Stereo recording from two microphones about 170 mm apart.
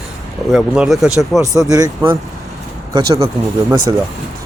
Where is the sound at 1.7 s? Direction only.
20° right (ahead or behind).